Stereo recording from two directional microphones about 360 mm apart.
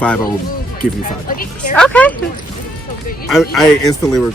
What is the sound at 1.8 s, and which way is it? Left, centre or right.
Speech, centre.